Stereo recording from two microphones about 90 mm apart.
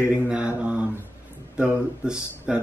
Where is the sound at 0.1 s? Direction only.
10° right (ahead or behind).